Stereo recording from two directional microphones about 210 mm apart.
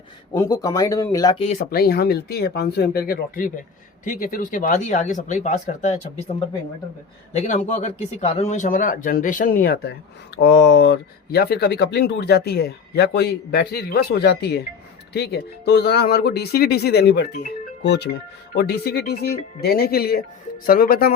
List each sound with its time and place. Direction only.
0.3 s speech: 15° left (ahead or behind)
1.7 s speech: 45° left (ahead or behind)
7.3 s speech: 35° left (ahead or behind)